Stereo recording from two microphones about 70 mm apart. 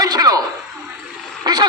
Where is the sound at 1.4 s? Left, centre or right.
Right.